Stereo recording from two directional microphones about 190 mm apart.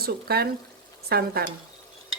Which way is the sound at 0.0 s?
55° right (ahead or behind).